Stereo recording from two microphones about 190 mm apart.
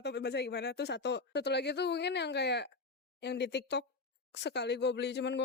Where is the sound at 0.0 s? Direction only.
65° left (ahead or behind).